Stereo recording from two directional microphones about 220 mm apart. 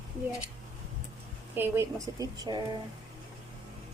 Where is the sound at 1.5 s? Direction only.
10° right (ahead or behind).